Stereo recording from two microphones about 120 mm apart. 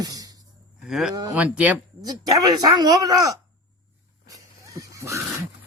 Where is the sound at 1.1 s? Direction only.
35° right (ahead or behind).